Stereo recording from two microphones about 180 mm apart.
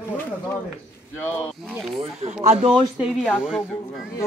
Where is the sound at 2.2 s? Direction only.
40° right (ahead or behind).